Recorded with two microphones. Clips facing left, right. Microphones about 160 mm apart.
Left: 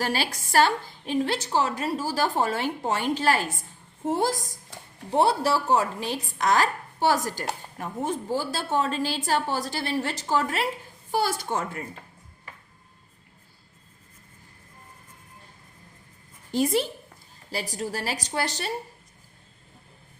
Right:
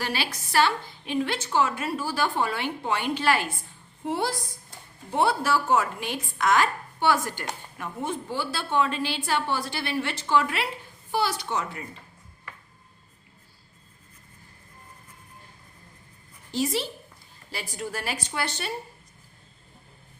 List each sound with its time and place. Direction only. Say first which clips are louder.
0.0 s a woman's voice: left 3 dB; 45° left (ahead or behind)
16.5 s a woman's voice: left 4 dB; 50° left (ahead or behind)
17.5 s a woman's voice: left 3 dB; 35° left (ahead or behind)